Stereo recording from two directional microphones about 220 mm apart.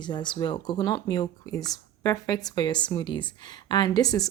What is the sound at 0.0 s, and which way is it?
A woman's voice, 20° left (ahead or behind).